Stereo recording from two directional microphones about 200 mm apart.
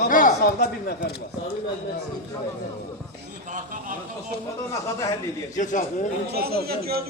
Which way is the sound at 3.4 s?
40° right (ahead or behind).